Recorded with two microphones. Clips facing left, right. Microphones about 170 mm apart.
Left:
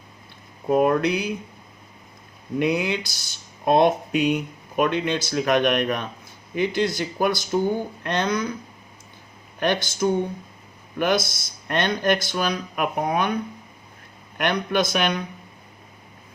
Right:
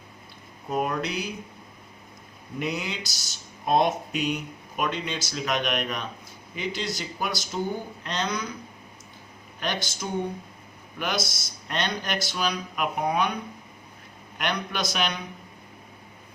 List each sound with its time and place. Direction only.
0.7 s speech: 50° left (ahead or behind)
2.6 s speech: 55° left (ahead or behind)
9.6 s speech: 55° left (ahead or behind)
14.3 s speech: 55° left (ahead or behind)